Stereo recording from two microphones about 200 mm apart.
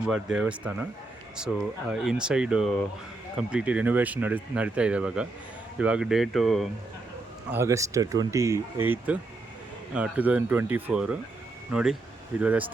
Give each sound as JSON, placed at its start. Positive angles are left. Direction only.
{"t": 0.0, "sound": "speech", "side_deg": -5}
{"t": 1.9, "sound": "speech", "side_deg": -5}
{"t": 7.5, "sound": "speech", "side_deg": -15}